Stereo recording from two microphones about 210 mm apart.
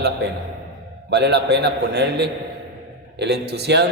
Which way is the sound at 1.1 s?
55° right (ahead or behind).